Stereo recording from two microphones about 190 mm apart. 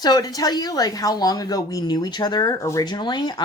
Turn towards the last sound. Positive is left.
turn(degrees=20)  # may be behind; listen again after turning